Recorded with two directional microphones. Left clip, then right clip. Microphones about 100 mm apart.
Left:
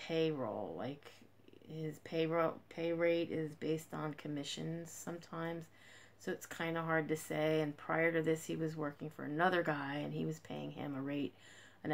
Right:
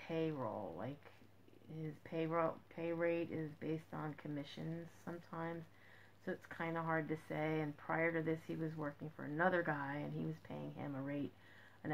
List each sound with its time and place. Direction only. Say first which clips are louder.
0.0 s speech: left 5 dB; 30° left (ahead or behind)